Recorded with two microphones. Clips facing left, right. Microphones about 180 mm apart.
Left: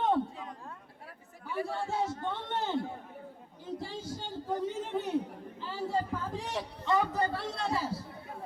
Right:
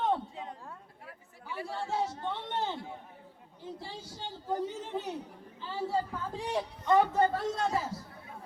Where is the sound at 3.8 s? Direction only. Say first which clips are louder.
Left 4 dB; 50° left (ahead or behind).